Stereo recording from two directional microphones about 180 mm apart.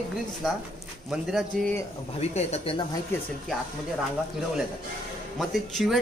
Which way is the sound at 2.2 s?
35° left (ahead or behind).